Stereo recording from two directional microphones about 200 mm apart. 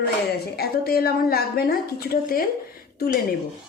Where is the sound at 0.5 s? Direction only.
50° left (ahead or behind).